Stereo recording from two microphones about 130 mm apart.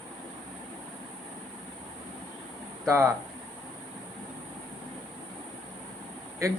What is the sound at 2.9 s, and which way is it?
Speech, 20° right (ahead or behind).